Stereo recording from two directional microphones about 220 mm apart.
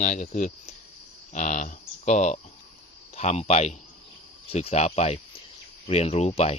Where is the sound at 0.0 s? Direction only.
30° left (ahead or behind).